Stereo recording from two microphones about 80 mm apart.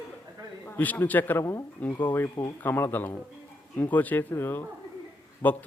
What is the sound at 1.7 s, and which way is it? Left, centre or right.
Speech, left.